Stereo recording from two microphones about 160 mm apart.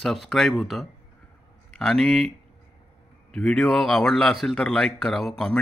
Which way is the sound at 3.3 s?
5° left (ahead or behind).